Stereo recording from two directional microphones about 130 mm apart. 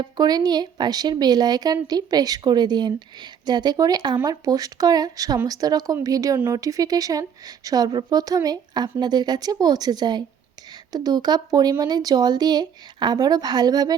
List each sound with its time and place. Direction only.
0.0 s speech: 30° right (ahead or behind)